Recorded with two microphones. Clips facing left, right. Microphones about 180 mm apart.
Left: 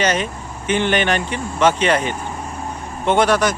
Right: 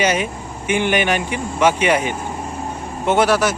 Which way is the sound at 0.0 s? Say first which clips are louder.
Right 1 dB; 10° right (ahead or behind).